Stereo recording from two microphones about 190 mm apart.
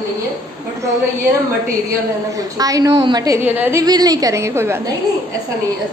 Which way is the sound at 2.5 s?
20° right (ahead or behind).